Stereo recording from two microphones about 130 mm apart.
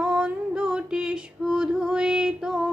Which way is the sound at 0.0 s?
5° right (ahead or behind).